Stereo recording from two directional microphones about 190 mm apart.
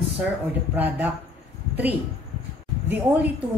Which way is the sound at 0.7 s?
10° right (ahead or behind).